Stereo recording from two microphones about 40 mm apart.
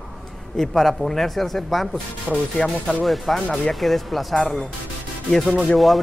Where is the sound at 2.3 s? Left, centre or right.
Right.